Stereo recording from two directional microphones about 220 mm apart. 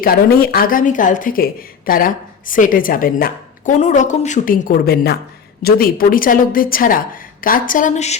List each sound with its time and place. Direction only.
0.0 s a woman's voice: 45° left (ahead or behind)